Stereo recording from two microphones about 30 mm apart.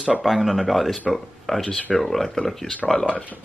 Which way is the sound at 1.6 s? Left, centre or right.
Left.